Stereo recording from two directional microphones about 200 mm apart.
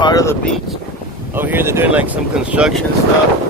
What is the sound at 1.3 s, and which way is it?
Speech, 10° right (ahead or behind).